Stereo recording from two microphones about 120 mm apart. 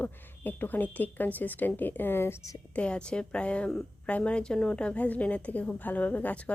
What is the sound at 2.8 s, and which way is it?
A woman's voice, 10° left (ahead or behind).